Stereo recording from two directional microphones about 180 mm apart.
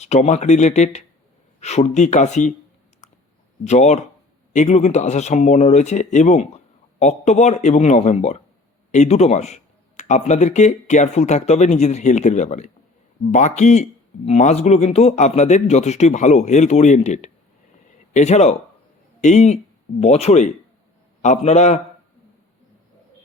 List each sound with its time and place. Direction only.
0.0 s speech: 40° left (ahead or behind)
3.0 s clicking: 40° left (ahead or behind)
3.6 s speech: 40° left (ahead or behind)